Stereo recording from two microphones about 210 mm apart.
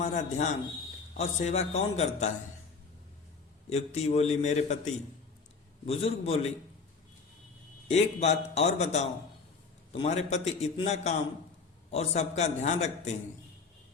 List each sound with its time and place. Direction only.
0.0 s a man's voice: 35° left (ahead or behind)
3.7 s a man's voice: 30° left (ahead or behind)
5.8 s a man's voice: 30° left (ahead or behind)
7.9 s a man's voice: 30° left (ahead or behind)